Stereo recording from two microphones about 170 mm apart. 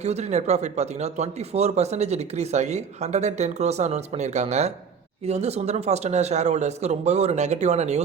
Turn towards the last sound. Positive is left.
turn(degrees=-40)  # may be behind; listen again after turning